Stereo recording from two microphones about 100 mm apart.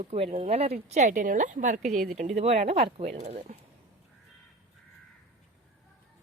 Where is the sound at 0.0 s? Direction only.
90° right.